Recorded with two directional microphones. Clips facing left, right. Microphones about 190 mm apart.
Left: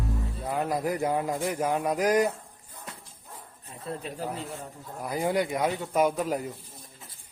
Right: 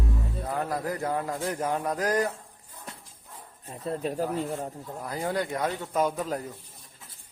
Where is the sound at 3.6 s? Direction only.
40° right (ahead or behind).